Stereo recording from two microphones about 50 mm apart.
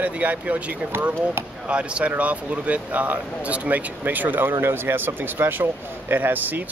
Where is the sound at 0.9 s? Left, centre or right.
Right.